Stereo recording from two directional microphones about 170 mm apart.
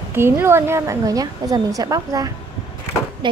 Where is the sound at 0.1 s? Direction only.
15° right (ahead or behind).